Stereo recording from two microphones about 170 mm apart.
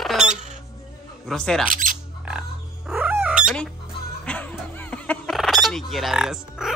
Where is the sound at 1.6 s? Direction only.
50° right (ahead or behind).